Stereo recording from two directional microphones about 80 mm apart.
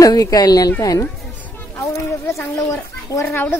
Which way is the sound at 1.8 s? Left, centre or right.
Left.